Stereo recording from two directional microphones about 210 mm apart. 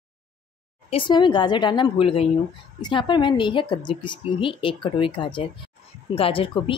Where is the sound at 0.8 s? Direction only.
25° left (ahead or behind).